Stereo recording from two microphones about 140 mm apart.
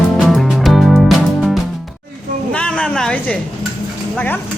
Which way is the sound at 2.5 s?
10° left (ahead or behind).